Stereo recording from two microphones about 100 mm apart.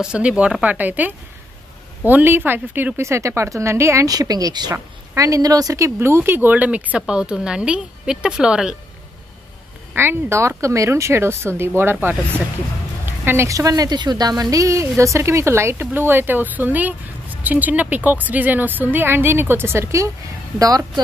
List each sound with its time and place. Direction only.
0.0 s a woman's voice: 10° right (ahead or behind); by 5.9 s 35° right (ahead or behind)
5.9 s a woman's voice: 25° right (ahead or behind); by 8.7 s 5° right (ahead or behind)
9.9 s a woman's voice: 25° right (ahead or behind)
13.0 s a sound: 20° right (ahead or behind)
13.5 s a woman's voice: 35° right (ahead or behind)
20.5 s a woman's voice: 40° right (ahead or behind)